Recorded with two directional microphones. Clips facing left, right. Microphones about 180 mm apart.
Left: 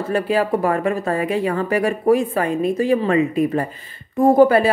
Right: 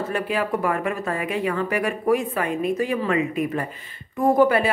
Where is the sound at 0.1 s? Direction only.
35° left (ahead or behind).